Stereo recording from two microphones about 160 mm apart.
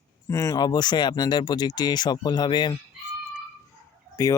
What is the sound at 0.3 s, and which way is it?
Speech, 20° left (ahead or behind).